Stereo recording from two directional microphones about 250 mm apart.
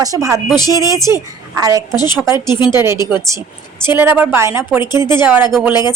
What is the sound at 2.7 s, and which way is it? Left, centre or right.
A woman's voice, centre.